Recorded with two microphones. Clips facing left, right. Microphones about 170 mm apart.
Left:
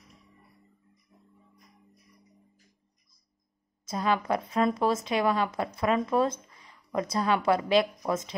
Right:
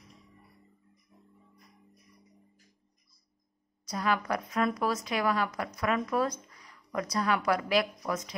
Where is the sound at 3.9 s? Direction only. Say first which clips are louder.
Left 3 dB; 25° left (ahead or behind).